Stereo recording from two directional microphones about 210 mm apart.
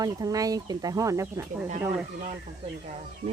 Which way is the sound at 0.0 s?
15° right (ahead or behind).